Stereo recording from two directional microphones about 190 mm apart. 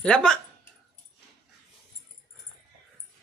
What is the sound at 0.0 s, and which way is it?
Speech, 5° left (ahead or behind).